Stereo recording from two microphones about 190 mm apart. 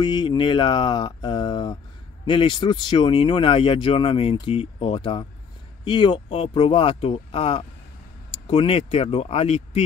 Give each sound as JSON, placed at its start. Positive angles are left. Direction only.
{"t": 0.0, "sound": "speech", "side_deg": 20}